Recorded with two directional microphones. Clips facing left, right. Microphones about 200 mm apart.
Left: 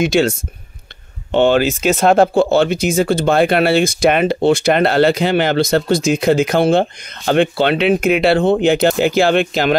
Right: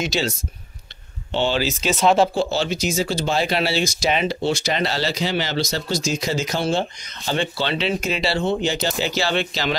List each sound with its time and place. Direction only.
0.0 s speech: 55° left (ahead or behind)